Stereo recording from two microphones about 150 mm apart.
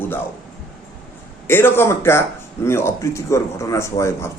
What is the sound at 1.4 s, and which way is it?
A man's voice, 15° left (ahead or behind).